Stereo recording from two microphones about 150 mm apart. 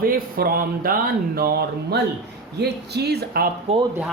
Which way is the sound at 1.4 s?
90° right.